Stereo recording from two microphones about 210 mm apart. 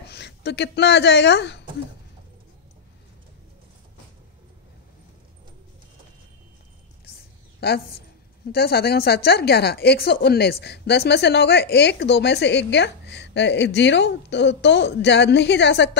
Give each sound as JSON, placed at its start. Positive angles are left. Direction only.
{"t": 0.1, "sound": "speech", "side_deg": 50}
{"t": 7.6, "sound": "a woman's voice", "side_deg": 50}